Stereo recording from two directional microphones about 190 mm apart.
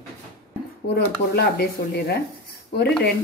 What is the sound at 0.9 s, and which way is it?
Speech, 60° left (ahead or behind).